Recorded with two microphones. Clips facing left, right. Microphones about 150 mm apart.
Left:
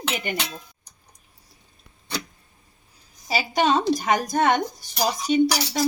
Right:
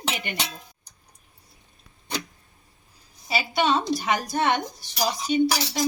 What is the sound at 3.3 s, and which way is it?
Speech, 40° left (ahead or behind).